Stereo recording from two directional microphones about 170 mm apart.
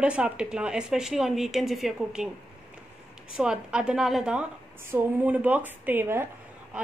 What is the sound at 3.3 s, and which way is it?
A woman's voice, 5° right (ahead or behind).